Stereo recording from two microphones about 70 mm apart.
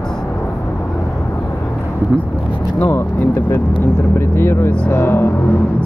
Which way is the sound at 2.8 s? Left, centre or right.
Left.